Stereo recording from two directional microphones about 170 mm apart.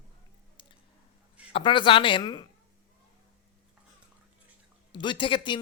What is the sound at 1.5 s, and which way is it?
Speech, 30° left (ahead or behind).